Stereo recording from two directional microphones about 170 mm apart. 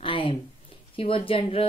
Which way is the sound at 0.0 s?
30° left (ahead or behind).